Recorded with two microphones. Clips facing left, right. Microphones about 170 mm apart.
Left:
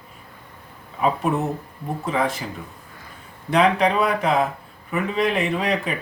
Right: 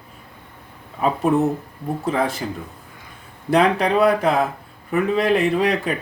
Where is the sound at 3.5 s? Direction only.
35° right (ahead or behind).